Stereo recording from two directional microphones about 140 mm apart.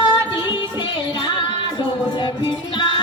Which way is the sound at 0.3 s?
35° left (ahead or behind).